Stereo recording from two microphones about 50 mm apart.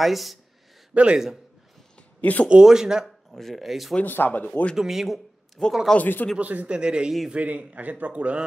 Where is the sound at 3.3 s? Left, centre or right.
Centre.